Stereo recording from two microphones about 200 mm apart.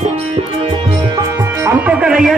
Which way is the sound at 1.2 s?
10° right (ahead or behind).